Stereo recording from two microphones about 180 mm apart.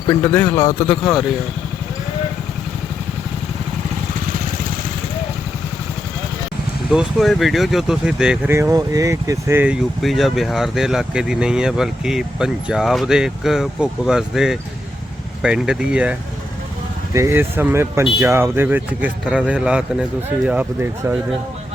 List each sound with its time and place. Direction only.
0.1 s speech: 10° left (ahead or behind)
0.9 s speech: 5° left (ahead or behind)
6.9 s speech: centre (ahead or behind)
8.5 s speech: 15° right (ahead or behind)
10.0 s speech: centre (ahead or behind)
17.2 s speech: 15° right (ahead or behind)